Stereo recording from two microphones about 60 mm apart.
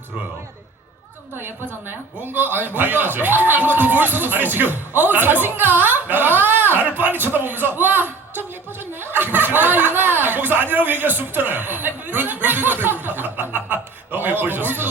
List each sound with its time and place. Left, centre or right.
2.2 s a man's voice: right